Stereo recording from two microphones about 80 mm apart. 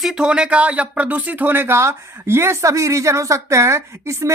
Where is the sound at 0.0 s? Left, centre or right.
Centre.